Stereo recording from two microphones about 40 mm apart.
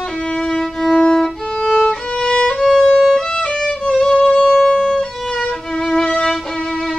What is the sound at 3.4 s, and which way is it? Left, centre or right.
Music, left.